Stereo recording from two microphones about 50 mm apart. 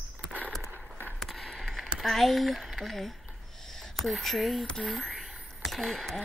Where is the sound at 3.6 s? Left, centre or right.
Centre.